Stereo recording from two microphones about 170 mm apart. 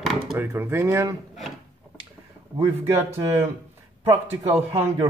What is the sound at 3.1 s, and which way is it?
Speech, 35° right (ahead or behind).